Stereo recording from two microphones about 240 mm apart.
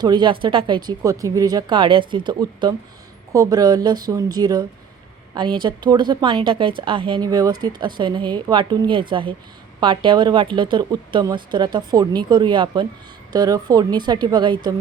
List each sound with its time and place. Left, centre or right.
0.0 s a woman's voice: centre